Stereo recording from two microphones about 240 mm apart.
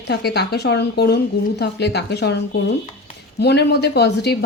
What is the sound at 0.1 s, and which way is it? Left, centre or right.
Speech, left.